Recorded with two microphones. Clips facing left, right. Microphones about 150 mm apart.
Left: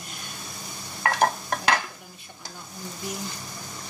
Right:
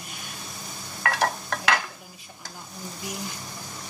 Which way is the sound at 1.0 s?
30° left (ahead or behind).